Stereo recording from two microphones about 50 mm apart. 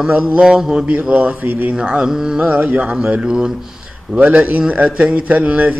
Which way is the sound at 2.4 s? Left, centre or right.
Right.